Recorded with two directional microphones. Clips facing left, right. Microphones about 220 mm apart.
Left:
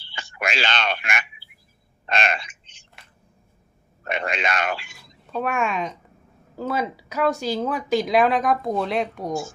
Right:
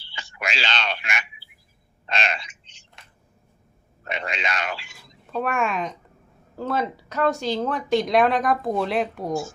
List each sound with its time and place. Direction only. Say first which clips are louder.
0.0 s a sound: left 3 dB; 50° left (ahead or behind)
4.0 s a man's voice: left 4 dB; 50° left (ahead or behind)
5.2 s speech: even; centre (ahead or behind)